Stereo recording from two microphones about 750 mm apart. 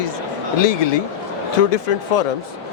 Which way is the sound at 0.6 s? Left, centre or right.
Left.